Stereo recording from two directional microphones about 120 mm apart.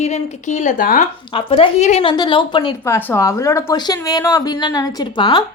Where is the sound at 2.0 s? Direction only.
45° left (ahead or behind).